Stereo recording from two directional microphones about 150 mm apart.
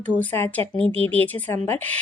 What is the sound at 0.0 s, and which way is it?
Speech, 10° left (ahead or behind).